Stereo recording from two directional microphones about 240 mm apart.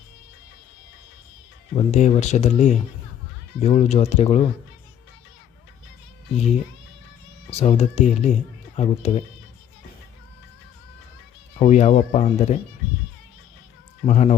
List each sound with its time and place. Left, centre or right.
1.7 s speech: left
7.5 s speech: left
11.6 s speech: left
14.0 s speech: left